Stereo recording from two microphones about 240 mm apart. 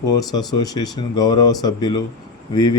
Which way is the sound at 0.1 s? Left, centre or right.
Centre.